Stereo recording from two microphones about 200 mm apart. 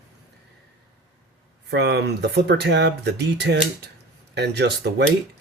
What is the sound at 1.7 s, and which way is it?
Speech, 55° right (ahead or behind).